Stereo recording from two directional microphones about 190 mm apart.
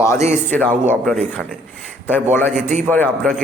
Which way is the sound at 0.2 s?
35° right (ahead or behind).